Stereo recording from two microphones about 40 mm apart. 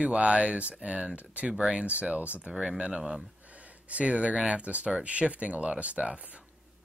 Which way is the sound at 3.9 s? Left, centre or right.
Right.